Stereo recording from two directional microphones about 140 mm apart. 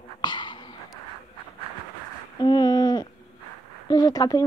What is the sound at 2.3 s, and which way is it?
Speech, 30° left (ahead or behind).